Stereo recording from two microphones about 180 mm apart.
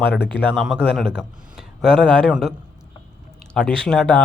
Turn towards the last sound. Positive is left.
turn(degrees=5)  # may be behind; listen again after turning